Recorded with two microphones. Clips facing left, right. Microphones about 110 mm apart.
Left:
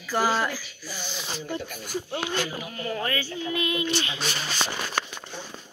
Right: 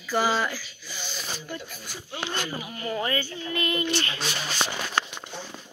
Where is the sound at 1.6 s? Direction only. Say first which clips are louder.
Left 8 dB; 55° left (ahead or behind).